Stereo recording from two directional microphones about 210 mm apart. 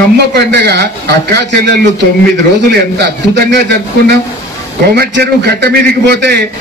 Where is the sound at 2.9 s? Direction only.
50° right (ahead or behind).